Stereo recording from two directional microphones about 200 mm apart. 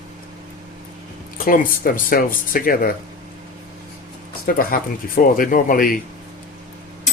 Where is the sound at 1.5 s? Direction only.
45° left (ahead or behind).